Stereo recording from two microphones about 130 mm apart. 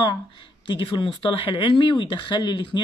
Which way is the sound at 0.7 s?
40° left (ahead or behind).